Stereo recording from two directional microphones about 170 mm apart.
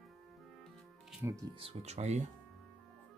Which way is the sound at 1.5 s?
30° right (ahead or behind).